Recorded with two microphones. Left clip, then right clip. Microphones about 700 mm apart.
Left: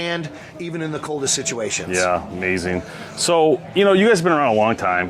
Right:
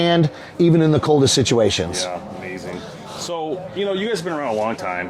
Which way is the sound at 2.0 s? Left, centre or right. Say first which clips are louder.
Left 7 dB; left.